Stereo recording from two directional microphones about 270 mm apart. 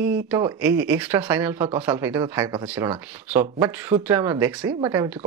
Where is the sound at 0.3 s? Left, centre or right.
Centre.